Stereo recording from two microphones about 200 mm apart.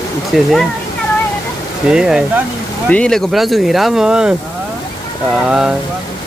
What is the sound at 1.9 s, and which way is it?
Speech, 5° right (ahead or behind).